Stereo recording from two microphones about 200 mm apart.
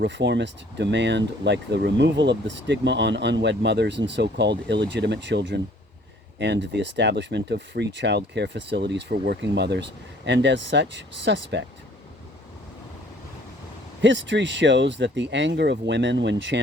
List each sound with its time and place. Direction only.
0.0 s speech: 60° right (ahead or behind)
14.0 s speech: 65° right (ahead or behind)